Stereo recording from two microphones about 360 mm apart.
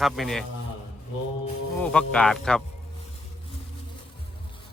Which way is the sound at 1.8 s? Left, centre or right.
Centre.